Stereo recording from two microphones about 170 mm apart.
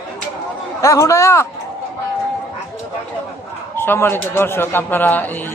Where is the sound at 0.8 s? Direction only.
20° left (ahead or behind).